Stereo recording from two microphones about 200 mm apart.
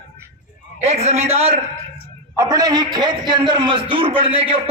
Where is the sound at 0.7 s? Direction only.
35° right (ahead or behind).